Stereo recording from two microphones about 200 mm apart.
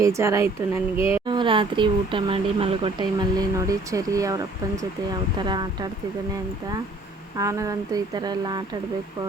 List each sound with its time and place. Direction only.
0.0 s speech: 15° right (ahead or behind)
0.9 s a sound: 30° left (ahead or behind)
1.3 s speech: 25° right (ahead or behind)
7.3 s speech: 15° right (ahead or behind)